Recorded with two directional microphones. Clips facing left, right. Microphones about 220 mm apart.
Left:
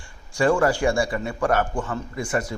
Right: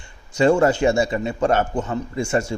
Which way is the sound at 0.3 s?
25° right (ahead or behind).